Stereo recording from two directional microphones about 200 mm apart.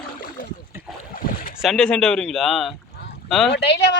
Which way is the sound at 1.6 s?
Centre (ahead or behind).